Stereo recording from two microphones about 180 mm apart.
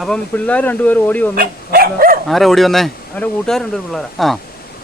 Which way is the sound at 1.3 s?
55° right (ahead or behind).